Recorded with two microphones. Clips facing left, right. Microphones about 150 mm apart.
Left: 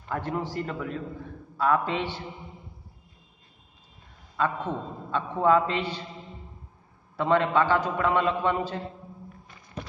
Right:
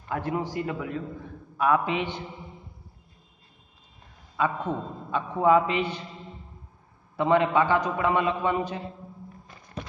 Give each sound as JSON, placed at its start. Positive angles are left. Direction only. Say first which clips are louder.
{"t": 0.1, "sound": "a man's voice", "louder": "right 1 dB", "side_deg": -10}
{"t": 4.4, "sound": "a man's voice", "louder": "right 1 dB", "side_deg": -15}
{"t": 7.2, "sound": "a man's voice", "louder": "right 1 dB", "side_deg": -15}